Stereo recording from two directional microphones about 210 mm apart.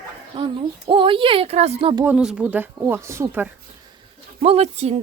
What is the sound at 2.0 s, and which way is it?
A woman's voice, 5° right (ahead or behind).